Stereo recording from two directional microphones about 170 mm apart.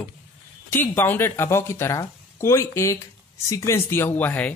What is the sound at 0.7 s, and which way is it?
Speech, 10° left (ahead or behind).